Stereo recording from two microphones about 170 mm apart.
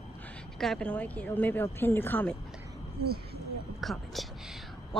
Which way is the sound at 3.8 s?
Centre (ahead or behind).